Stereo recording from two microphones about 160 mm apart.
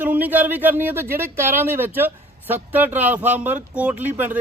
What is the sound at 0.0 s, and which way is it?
Speech, 10° right (ahead or behind).